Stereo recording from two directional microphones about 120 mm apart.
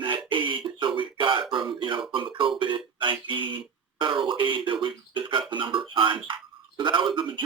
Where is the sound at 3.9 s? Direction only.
40° right (ahead or behind).